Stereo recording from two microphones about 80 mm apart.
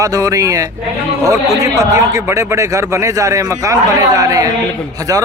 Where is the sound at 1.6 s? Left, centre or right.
Right.